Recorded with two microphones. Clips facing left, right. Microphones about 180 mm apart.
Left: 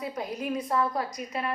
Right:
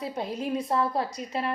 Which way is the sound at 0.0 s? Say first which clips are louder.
Right 2 dB; 25° right (ahead or behind).